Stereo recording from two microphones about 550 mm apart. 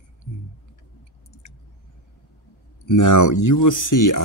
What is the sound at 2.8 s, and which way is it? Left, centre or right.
Speech, left.